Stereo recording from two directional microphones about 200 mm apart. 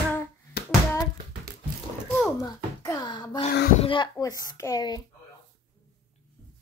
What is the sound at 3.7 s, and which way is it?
Speech, 25° left (ahead or behind).